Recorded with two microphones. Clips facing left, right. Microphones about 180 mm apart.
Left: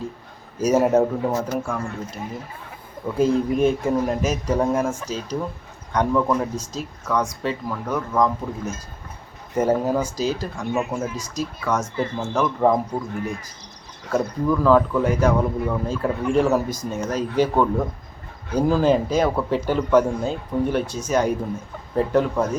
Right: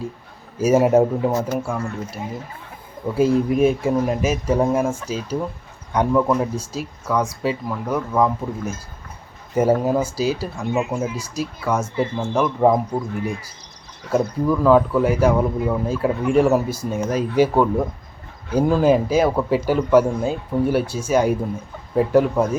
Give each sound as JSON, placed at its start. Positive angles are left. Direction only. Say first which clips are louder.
{"t": 0.6, "sound": "a man's voice", "louder": "right 2 dB", "side_deg": -10}
{"t": 3.2, "sound": "a man's voice", "louder": "right 2 dB", "side_deg": -5}
{"t": 9.7, "sound": "a man's voice", "louder": "right 2 dB", "side_deg": -10}
{"t": 10.8, "sound": "a man's voice", "louder": "right 3 dB", "side_deg": -20}
{"t": 14.1, "sound": "a man's voice", "louder": "right 2 dB", "side_deg": -5}